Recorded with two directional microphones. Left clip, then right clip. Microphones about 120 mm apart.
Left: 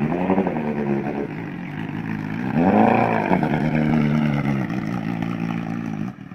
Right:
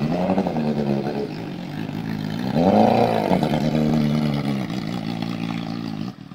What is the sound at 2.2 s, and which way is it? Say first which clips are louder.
Vehicle: right 1 dB; 35° right (ahead or behind).